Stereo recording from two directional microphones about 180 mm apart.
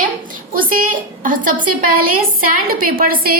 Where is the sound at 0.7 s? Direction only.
50° right (ahead or behind).